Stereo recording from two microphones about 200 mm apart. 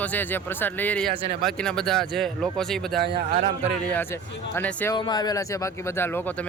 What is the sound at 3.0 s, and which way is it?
Speech, 55° right (ahead or behind).